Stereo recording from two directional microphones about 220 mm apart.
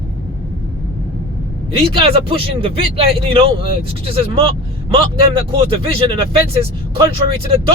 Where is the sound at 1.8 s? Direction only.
25° right (ahead or behind).